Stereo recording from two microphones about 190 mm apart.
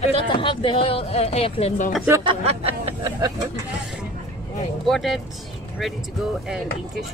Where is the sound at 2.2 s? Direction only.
35° right (ahead or behind).